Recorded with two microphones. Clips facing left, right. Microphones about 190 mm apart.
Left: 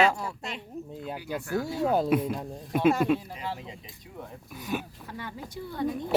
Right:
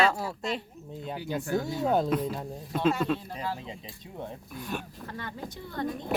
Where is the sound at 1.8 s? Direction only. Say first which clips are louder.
Left 3 dB; 5° left (ahead or behind).